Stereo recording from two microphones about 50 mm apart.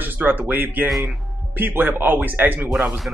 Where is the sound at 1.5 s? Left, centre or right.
Right.